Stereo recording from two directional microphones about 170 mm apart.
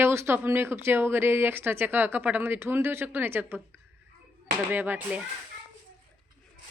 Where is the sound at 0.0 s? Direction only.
15° right (ahead or behind).